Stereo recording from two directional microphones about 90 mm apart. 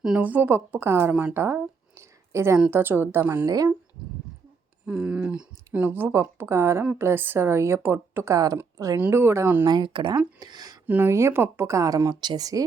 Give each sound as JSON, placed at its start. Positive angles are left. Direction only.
{"t": 0.2, "sound": "a woman's voice", "side_deg": -20}
{"t": 2.0, "sound": "a sound", "side_deg": -30}
{"t": 2.6, "sound": "a woman's voice", "side_deg": -25}
{"t": 3.4, "sound": "speech", "side_deg": -40}
{"t": 4.9, "sound": "speech", "side_deg": -10}
{"t": 5.9, "sound": "a woman's voice", "side_deg": -25}
{"t": 9.0, "sound": "a woman's voice", "side_deg": -25}
{"t": 9.6, "sound": "speech", "side_deg": -60}
{"t": 10.4, "sound": "speech", "side_deg": -45}
{"t": 10.8, "sound": "speech", "side_deg": -20}
{"t": 12.2, "sound": "speech", "side_deg": -50}